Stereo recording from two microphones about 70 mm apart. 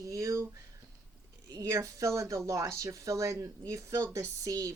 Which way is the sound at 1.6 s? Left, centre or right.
Right.